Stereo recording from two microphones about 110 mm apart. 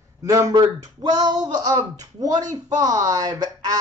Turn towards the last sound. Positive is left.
turn(degrees=-35)  # may be behind; listen again after turning